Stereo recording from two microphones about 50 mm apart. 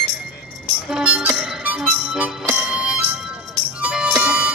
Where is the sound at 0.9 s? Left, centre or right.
Centre.